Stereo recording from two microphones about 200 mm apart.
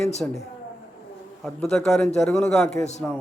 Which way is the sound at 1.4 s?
Centre (ahead or behind).